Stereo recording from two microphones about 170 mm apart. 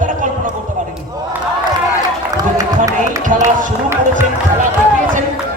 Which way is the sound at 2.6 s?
20° right (ahead or behind).